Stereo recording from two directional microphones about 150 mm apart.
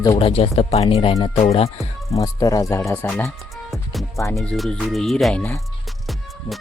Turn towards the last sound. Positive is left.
turn(degrees=5)  # may be behind; listen again after turning